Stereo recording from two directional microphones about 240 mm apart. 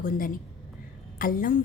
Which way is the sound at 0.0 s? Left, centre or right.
Left.